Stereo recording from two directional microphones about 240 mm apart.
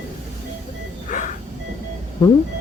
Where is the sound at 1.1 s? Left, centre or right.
Left.